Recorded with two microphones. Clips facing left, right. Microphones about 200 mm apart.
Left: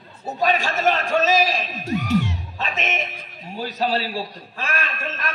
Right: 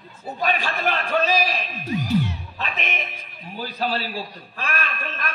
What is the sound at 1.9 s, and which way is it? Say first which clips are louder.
Music: left 1 dB; 80° left.